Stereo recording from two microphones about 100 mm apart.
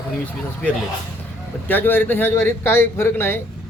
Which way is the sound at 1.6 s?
20° left (ahead or behind).